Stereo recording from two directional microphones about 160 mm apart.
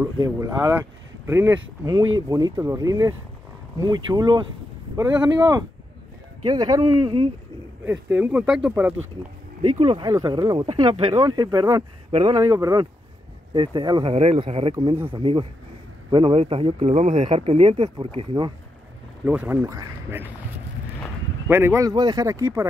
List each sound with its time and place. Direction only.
0.2 s speech: 20° right (ahead or behind)
8.1 s speech: 5° right (ahead or behind)
9.6 s speech: 40° right (ahead or behind)
10.0 s speech: 20° right (ahead or behind); by 17.1 s 45° right (ahead or behind)
17.1 s speech: 35° right (ahead or behind)
19.2 s speech: 10° right (ahead or behind)
19.6 s speech: 20° right (ahead or behind)
21.5 s speech: 15° right (ahead or behind)